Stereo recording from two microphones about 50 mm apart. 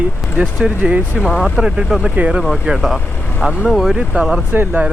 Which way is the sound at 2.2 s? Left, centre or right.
Right.